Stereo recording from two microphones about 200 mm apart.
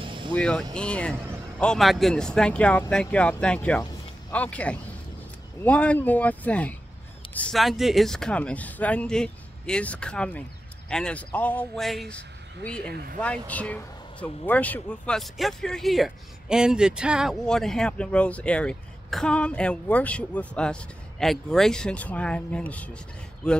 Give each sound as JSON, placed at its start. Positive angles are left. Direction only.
{"t": 0.0, "sound": "vehicle", "side_deg": -25}
{"t": 0.3, "sound": "speech", "side_deg": 5}
{"t": 12.8, "sound": "speech", "side_deg": -50}
{"t": 13.2, "sound": "speech", "side_deg": 5}